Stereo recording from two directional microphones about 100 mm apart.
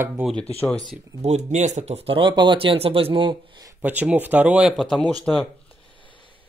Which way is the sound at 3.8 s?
15° right (ahead or behind).